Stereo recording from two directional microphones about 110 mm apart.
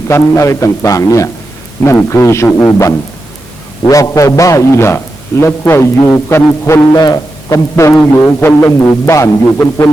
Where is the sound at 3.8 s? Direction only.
30° left (ahead or behind).